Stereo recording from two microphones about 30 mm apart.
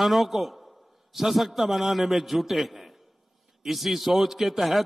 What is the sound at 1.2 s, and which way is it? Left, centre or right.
A man's voice, centre.